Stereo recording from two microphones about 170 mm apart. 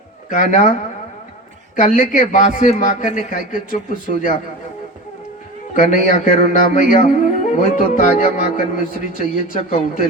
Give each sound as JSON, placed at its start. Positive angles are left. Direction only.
{"t": 0.3, "sound": "a man's voice", "side_deg": 50}
{"t": 1.7, "sound": "a man's voice", "side_deg": 50}
{"t": 5.7, "sound": "a man's voice", "side_deg": 50}